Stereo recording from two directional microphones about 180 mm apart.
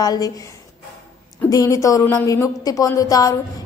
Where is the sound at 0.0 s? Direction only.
20° left (ahead or behind).